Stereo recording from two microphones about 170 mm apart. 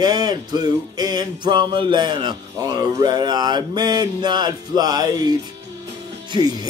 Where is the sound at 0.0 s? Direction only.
25° right (ahead or behind).